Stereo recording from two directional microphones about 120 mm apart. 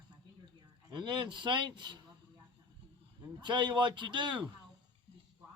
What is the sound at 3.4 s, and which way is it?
Speech, 40° right (ahead or behind).